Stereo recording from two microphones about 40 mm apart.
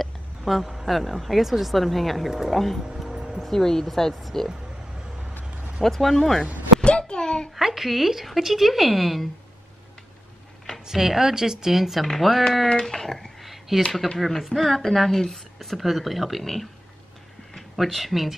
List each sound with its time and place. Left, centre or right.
0.0 s a woman's voice: centre
5.9 s speech: centre
6.8 s a sound: left
7.5 s a woman's voice: centre
10.9 s a woman's voice: centre
13.4 s a sound: centre
14.1 s a woman's voice: centre
17.8 s a woman's voice: centre